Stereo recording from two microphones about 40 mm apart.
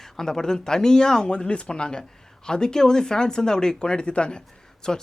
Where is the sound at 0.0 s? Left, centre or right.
Centre.